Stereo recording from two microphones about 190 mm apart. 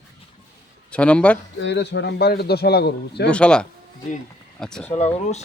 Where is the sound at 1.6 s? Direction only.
65° left (ahead or behind).